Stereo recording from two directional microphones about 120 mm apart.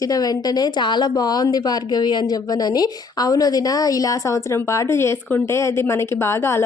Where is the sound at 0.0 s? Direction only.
30° left (ahead or behind).